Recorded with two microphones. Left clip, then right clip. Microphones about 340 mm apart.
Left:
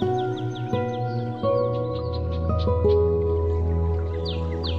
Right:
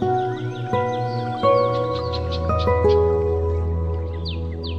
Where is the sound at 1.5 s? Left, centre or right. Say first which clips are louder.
Right 5 dB; right.